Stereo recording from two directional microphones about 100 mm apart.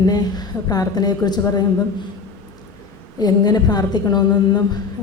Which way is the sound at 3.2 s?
45° left (ahead or behind).